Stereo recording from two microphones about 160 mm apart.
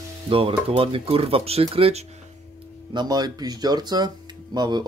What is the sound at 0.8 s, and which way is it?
Speech, 35° right (ahead or behind).